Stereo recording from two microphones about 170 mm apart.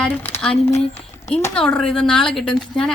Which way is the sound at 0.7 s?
40° left (ahead or behind).